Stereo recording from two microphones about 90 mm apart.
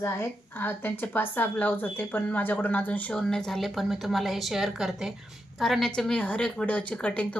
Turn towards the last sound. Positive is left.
turn(degrees=15)  # may be behind; listen again after turning